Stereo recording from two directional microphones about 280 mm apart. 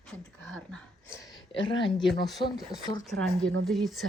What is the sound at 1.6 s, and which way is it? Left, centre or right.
Speech, centre.